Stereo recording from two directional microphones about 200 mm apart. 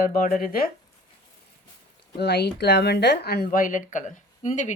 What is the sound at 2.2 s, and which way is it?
Speech, 55° left (ahead or behind).